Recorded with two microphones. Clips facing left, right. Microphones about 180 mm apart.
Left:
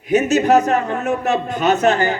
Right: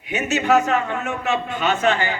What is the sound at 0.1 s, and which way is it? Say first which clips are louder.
A man's voice: left 5 dB; 40° left (ahead or behind).